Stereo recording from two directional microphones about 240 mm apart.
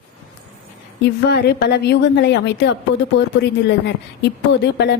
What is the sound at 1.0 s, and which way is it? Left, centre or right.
A woman's voice, left.